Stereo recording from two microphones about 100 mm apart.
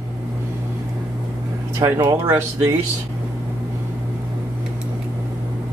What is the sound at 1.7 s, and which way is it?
Speech, 30° right (ahead or behind).